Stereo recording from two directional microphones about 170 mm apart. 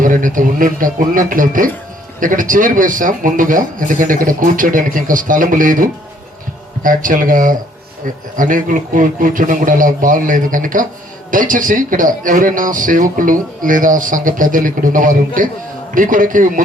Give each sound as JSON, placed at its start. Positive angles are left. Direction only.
{"t": 0.0, "sound": "a man's voice", "side_deg": -50}